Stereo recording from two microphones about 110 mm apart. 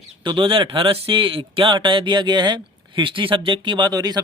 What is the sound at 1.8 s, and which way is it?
Speech, 45° right (ahead or behind).